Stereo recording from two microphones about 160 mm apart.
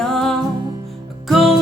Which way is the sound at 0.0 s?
Centre (ahead or behind).